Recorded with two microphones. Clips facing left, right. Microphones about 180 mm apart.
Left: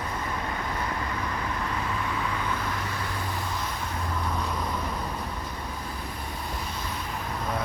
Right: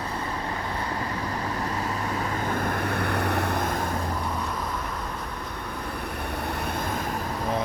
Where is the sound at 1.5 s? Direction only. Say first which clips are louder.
Right 2 dB; 40° right (ahead or behind); by 3.9 s 55° right (ahead or behind).